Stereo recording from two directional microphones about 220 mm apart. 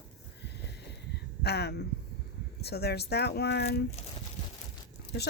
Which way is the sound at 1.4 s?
45° left (ahead or behind).